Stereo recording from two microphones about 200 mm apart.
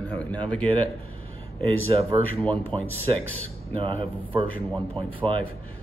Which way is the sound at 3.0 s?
10° left (ahead or behind).